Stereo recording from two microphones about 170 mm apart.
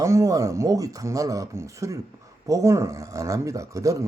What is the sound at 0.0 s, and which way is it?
Speech, 20° right (ahead or behind).